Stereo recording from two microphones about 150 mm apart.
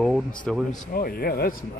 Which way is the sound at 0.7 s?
65° left (ahead or behind).